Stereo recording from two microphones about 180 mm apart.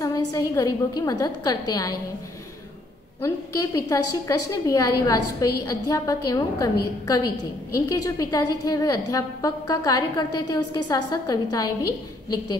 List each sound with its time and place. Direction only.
0.0 s a woman's voice: 20° left (ahead or behind)
3.2 s a woman's voice: 15° left (ahead or behind)